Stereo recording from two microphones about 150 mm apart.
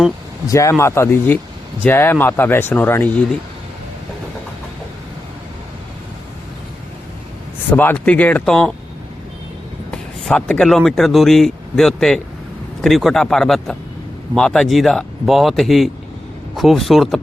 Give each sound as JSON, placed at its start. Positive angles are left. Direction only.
{"t": 0.4, "sound": "speech", "side_deg": 20}
{"t": 7.7, "sound": "speech", "side_deg": 10}
{"t": 9.9, "sound": "a man's voice", "side_deg": 5}